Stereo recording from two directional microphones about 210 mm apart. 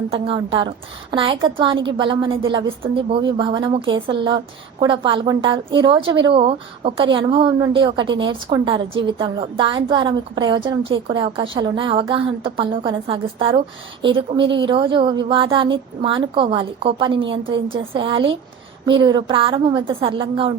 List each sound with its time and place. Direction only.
0.1 s a woman's voice: 25° right (ahead or behind)